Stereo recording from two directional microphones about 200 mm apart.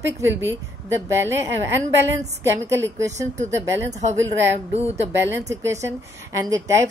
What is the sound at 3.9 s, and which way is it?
Speech, 35° right (ahead or behind).